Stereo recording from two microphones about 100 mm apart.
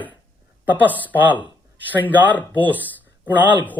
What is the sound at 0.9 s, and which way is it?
Speech, 15° left (ahead or behind).